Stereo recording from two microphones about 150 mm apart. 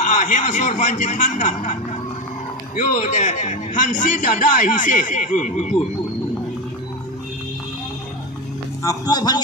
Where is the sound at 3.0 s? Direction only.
50° left (ahead or behind).